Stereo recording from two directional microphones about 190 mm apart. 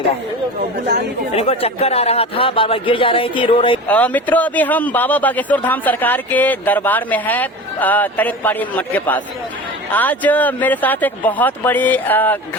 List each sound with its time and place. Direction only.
1.3 s speech: 30° left (ahead or behind)
3.8 s speech: 10° left (ahead or behind)